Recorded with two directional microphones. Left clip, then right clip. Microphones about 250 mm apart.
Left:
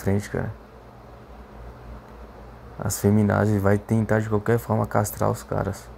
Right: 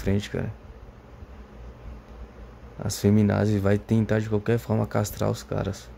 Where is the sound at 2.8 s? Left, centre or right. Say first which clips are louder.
Left 1 dB; centre.